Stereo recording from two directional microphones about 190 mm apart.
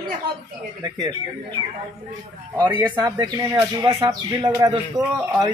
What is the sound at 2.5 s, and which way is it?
Speech, 25° right (ahead or behind).